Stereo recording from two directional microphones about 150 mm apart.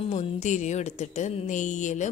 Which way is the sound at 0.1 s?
50° left (ahead or behind).